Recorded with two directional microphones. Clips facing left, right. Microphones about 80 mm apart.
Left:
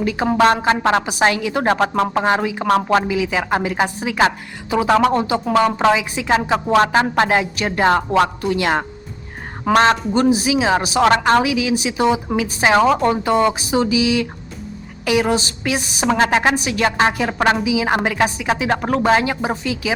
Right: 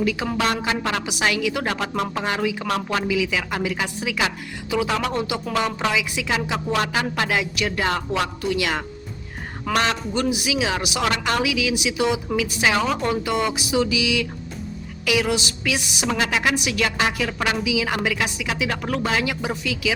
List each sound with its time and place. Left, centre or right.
0.0 s a woman's voice: left